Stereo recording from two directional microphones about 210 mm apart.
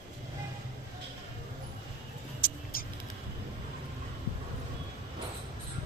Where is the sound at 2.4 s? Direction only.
45° left (ahead or behind).